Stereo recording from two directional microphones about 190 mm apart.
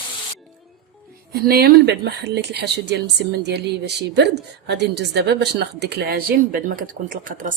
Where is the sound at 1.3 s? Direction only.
50° right (ahead or behind).